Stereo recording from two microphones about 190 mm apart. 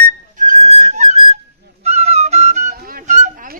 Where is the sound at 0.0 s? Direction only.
40° right (ahead or behind).